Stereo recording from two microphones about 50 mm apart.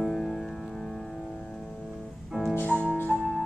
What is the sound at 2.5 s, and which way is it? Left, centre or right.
Music, left.